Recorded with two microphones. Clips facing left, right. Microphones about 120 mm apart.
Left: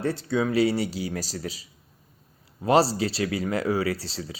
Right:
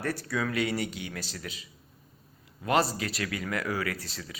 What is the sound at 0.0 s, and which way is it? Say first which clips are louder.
Speech: left 6 dB; 25° left (ahead or behind).